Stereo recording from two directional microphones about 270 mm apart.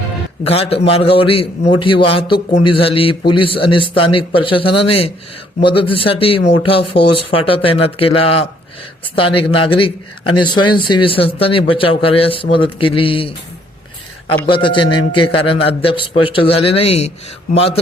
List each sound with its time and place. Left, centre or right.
0.4 s a man's voice: left
14.4 s a man's voice: centre